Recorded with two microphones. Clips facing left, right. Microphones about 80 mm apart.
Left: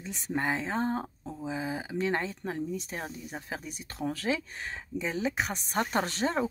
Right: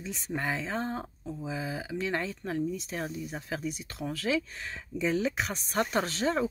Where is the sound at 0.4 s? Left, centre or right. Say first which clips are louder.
Left 3 dB; left.